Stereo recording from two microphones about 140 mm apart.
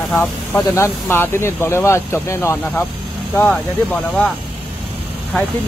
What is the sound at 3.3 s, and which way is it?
Speech, 10° left (ahead or behind).